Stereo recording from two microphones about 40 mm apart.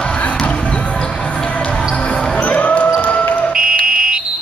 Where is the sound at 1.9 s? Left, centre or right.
Left.